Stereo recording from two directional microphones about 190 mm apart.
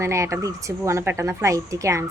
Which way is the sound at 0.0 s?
15° right (ahead or behind).